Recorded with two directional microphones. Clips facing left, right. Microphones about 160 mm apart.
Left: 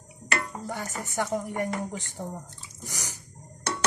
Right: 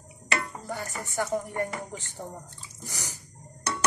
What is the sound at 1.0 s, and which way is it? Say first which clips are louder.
Speech: even; 15° left (ahead or behind).